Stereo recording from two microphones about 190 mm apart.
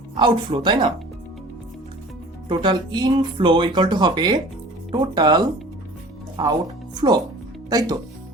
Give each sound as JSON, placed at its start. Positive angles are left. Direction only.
{"t": 0.2, "sound": "speech", "side_deg": -25}
{"t": 2.5, "sound": "speech", "side_deg": -25}